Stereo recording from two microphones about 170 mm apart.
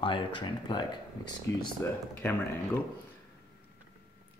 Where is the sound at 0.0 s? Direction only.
30° left (ahead or behind).